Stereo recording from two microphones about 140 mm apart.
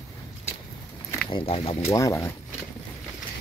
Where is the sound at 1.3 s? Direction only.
40° left (ahead or behind).